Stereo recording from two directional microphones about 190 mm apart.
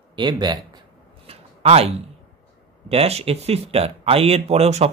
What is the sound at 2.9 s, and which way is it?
Speech, 35° right (ahead or behind).